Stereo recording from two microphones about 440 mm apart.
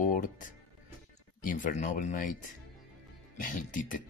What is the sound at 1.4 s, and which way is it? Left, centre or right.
Speech, centre.